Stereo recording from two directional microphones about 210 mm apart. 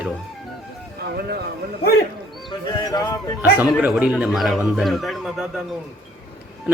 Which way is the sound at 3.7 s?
5° right (ahead or behind).